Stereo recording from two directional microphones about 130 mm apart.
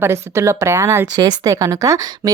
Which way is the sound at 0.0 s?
20° right (ahead or behind).